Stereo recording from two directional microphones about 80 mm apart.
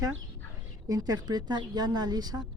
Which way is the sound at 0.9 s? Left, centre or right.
Right.